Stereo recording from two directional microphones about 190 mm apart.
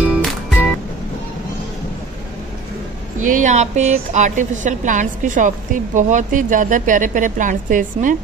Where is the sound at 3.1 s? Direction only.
45° right (ahead or behind).